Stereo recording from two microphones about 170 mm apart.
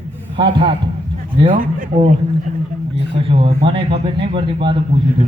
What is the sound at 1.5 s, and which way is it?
Speech, 55° right (ahead or behind).